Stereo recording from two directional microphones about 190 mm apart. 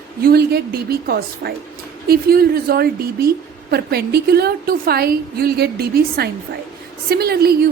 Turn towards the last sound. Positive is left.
turn(degrees=-55)  # may be behind; listen again after turning